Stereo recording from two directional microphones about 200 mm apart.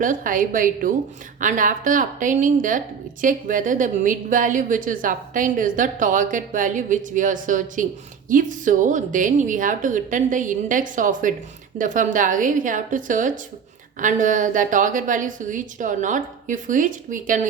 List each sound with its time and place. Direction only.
0.0 s a woman's voice: 40° right (ahead or behind)